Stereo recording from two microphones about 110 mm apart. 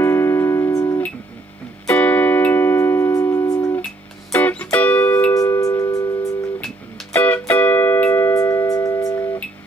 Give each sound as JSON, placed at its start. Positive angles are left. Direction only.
{"t": 0.0, "sound": "music", "side_deg": 25}
{"t": 1.9, "sound": "music", "side_deg": 15}
{"t": 4.3, "sound": "music", "side_deg": 15}
{"t": 5.3, "sound": "music", "side_deg": 30}
{"t": 7.2, "sound": "music", "side_deg": 15}